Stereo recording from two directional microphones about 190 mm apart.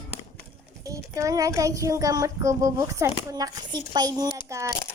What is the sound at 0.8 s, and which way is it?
Speech, 15° right (ahead or behind).